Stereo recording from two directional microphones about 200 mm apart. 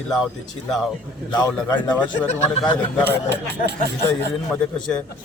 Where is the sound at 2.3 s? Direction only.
35° left (ahead or behind).